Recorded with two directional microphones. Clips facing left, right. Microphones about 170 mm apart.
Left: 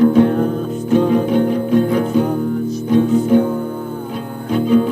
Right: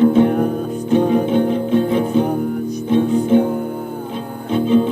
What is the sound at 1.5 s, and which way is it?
Music, centre (ahead or behind).